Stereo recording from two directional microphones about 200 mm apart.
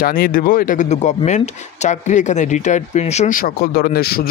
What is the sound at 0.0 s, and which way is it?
Speech, 45° left (ahead or behind).